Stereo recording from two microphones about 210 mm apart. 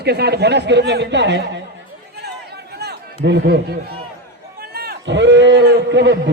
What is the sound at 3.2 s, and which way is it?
A man's voice, 55° right (ahead or behind).